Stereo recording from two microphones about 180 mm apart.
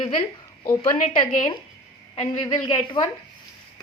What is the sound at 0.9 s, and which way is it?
Speech, 45° left (ahead or behind).